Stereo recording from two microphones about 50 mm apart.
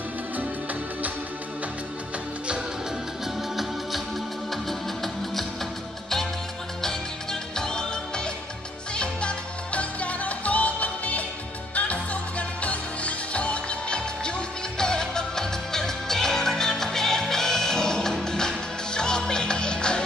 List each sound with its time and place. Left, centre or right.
4.6 s music: centre
7.5 s music: centre